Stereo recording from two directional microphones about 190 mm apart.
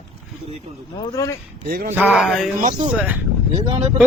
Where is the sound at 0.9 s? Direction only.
20° left (ahead or behind).